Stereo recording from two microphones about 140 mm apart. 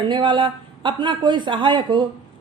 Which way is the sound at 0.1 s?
35° right (ahead or behind).